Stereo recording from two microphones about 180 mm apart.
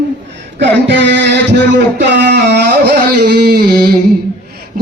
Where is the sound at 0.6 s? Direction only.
75° right (ahead or behind); by 3.9 s 60° right (ahead or behind).